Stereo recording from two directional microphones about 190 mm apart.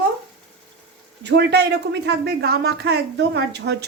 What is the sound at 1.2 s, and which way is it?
Speech, 65° right (ahead or behind).